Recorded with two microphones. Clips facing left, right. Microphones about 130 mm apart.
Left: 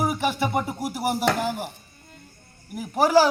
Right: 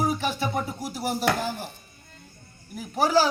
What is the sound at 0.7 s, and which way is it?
Speech, 65° left (ahead or behind).